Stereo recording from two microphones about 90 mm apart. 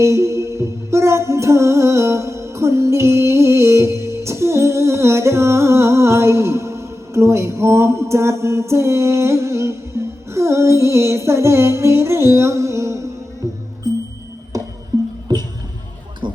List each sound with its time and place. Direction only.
0.0 s music: 30° right (ahead or behind)
14.5 s music: 40° right (ahead or behind)
16.2 s a sound: 60° right (ahead or behind)